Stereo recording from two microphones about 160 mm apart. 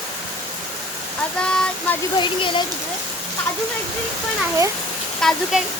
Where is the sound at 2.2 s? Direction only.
30° left (ahead or behind).